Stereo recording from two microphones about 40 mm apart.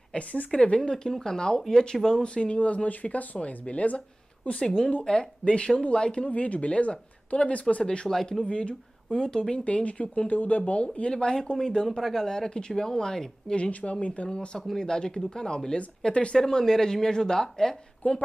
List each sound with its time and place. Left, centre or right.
0.1 s speech: left
0.5 s speech: left
4.6 s speech: centre
5.4 s speech: left
6.3 s speech: left
8.1 s speech: centre
9.7 s speech: left; by 13.6 s centre
13.6 s speech: left; by 17.7 s centre
18.0 s a woman's voice: left